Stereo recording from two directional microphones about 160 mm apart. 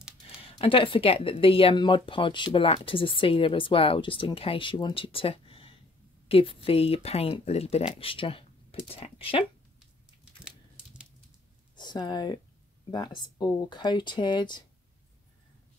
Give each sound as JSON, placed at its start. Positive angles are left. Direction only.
{"t": 0.5, "sound": "speech", "side_deg": 35}
{"t": 10.4, "sound": "a sound", "side_deg": -5}
{"t": 11.7, "sound": "speech", "side_deg": 30}